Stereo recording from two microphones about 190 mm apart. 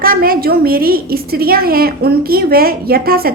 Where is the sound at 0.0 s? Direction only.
50° right (ahead or behind).